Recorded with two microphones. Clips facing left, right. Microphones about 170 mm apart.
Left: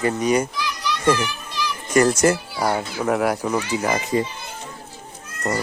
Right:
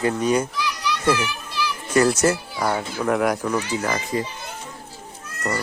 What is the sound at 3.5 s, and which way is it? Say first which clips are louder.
Speech: left 2 dB; 20° left (ahead or behind).